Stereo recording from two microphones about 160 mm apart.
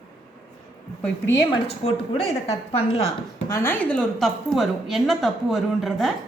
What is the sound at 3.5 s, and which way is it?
Speech, 15° left (ahead or behind).